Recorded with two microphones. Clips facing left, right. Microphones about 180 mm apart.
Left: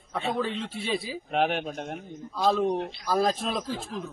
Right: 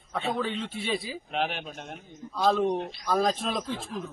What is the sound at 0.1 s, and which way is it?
A man's voice, centre (ahead or behind).